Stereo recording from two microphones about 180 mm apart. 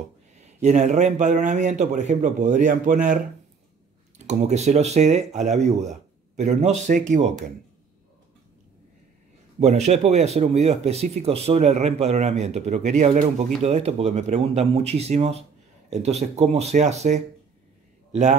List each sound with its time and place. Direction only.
0.4 s a man's voice: 40° right (ahead or behind)
4.3 s speech: 40° right (ahead or behind)
9.6 s speech: 40° right (ahead or behind)